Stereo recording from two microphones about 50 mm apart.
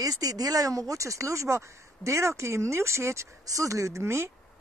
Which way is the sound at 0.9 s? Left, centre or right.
Right.